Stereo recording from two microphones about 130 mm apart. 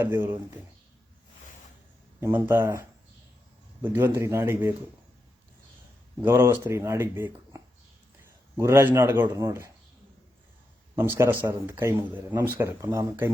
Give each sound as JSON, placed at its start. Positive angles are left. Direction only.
{"t": 0.0, "sound": "speech", "side_deg": -20}
{"t": 2.2, "sound": "speech", "side_deg": -20}
{"t": 6.2, "sound": "speech", "side_deg": -20}
{"t": 8.5, "sound": "speech", "side_deg": -20}
{"t": 10.9, "sound": "speech", "side_deg": -15}